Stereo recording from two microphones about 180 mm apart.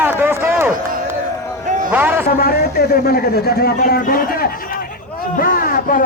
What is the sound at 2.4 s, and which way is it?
A man's voice, 60° left (ahead or behind).